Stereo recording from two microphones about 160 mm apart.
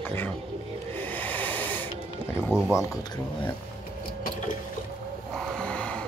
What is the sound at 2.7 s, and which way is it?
Speech, 15° left (ahead or behind).